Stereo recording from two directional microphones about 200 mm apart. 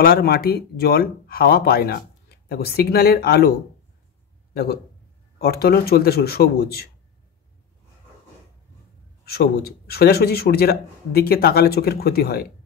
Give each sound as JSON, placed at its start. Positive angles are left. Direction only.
{"t": 0.0, "sound": "speech", "side_deg": 50}
{"t": 5.4, "sound": "speech", "side_deg": 50}
{"t": 9.2, "sound": "speech", "side_deg": 50}